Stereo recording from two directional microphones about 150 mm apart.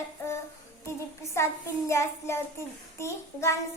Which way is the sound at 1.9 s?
20° left (ahead or behind).